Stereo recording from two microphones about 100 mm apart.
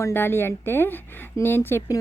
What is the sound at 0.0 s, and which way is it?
Speech, 25° left (ahead or behind).